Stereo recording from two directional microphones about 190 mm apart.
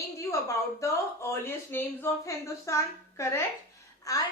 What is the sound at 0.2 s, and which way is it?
A woman's voice, 15° left (ahead or behind).